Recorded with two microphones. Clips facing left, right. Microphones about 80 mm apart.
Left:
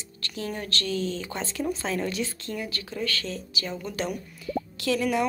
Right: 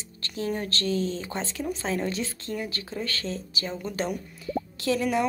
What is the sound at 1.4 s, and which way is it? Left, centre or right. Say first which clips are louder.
A woman's voice: left 1 dB; centre.